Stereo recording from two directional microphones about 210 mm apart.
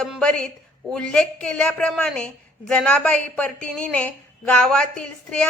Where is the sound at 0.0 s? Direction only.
5° left (ahead or behind).